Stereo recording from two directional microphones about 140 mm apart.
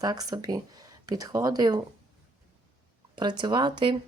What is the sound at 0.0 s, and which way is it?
Speech, 25° right (ahead or behind).